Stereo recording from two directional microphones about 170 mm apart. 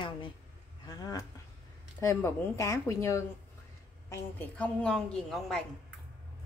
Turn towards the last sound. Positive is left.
turn(degrees=0)  # may be behind; listen again after turning